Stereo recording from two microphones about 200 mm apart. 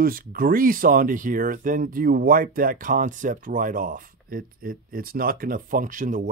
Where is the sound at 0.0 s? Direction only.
45° right (ahead or behind).